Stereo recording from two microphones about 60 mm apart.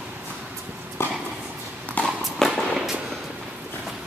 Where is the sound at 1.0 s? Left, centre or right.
Left.